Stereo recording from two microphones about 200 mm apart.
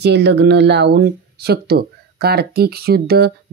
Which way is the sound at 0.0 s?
60° right (ahead or behind).